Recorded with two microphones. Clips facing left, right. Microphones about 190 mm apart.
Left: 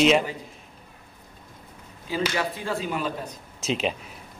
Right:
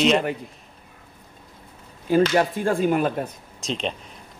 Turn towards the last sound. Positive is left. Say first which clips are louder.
# left 2 dB
turn(degrees=5)  # may be behind; listen again after turning